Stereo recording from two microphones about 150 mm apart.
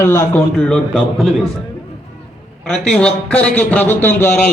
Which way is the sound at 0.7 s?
5° left (ahead or behind).